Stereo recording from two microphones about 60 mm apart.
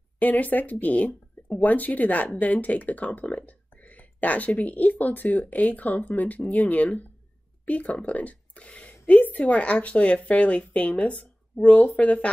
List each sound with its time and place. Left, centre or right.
0.2 s a woman's voice: left